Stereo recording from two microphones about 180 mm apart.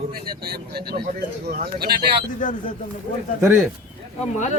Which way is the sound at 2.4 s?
45° left (ahead or behind).